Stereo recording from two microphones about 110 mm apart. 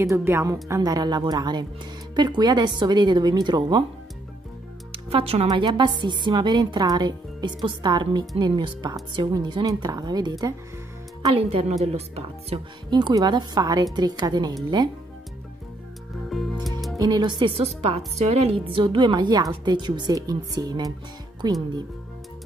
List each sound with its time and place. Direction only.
0.0 s a woman's voice: 25° right (ahead or behind); by 3.8 s 40° right (ahead or behind)
4.9 s speech: 60° right (ahead or behind)
5.5 s a woman's voice: 40° right (ahead or behind)
11.2 s a woman's voice: 60° right (ahead or behind)
12.9 s a woman's voice: 40° right (ahead or behind)
16.9 s speech: 35° right (ahead or behind)
17.6 s a woman's voice: 70° right (ahead or behind); by 21.6 s 40° right (ahead or behind)